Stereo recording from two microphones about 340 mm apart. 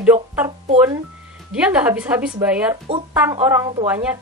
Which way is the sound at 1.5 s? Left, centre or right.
Centre.